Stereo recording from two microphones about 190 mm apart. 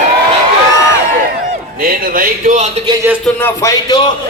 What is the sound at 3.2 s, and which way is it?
Speech, 10° left (ahead or behind).